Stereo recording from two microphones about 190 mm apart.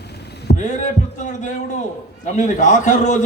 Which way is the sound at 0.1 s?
60° left (ahead or behind).